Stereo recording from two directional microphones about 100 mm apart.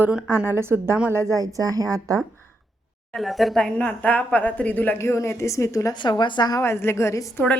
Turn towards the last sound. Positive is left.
turn(degrees=30)  # may be behind; listen again after turning